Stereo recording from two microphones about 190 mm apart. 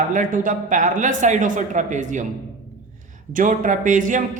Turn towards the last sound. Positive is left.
turn(degrees=-45)  # may be behind; listen again after turning